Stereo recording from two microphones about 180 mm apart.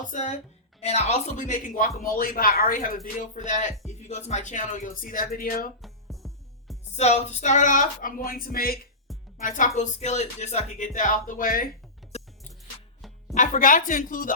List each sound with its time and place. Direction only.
0.1 s speech: 40° left (ahead or behind)
5.8 s music: centre (ahead or behind)
6.9 s speech: 35° left (ahead or behind)
12.1 s music: 35° left (ahead or behind)
13.3 s speech: 45° left (ahead or behind)